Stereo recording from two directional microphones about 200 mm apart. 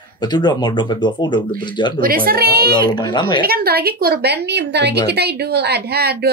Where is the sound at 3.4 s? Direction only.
50° right (ahead or behind).